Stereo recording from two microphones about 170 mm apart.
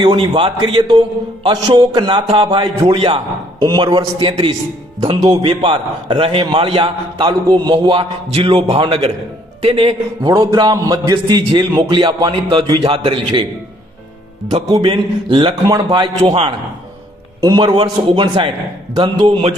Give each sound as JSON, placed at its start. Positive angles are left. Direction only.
{"t": 0.0, "sound": "a man's voice", "side_deg": -30}
{"t": 14.7, "sound": "a man's voice", "side_deg": -25}